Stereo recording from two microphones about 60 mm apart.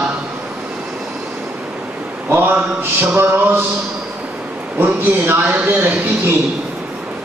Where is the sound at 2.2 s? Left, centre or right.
Right.